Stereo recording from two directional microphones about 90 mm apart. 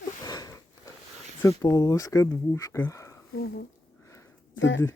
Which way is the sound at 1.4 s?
25° left (ahead or behind).